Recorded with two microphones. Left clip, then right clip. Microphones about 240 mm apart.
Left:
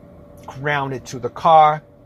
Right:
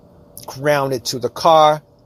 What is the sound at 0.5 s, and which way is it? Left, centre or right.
Speech, right.